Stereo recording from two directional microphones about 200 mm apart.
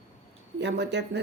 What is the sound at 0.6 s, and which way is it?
Speech, 60° right (ahead or behind).